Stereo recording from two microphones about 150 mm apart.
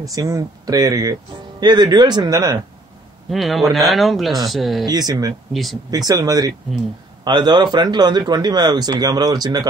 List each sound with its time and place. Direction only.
0.0 s speech: 25° right (ahead or behind)
3.3 s speech: centre (ahead or behind)
4.8 s speech: 25° right (ahead or behind)
5.5 s speech: centre (ahead or behind)
5.9 s speech: 25° right (ahead or behind)